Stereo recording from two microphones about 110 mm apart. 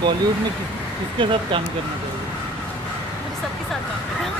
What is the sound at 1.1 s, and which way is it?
Speech, 50° right (ahead or behind).